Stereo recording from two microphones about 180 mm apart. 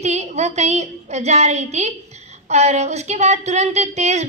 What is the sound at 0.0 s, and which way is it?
A woman's voice, 40° right (ahead or behind).